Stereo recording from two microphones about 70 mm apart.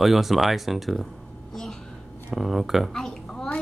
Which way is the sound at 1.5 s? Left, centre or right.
Centre.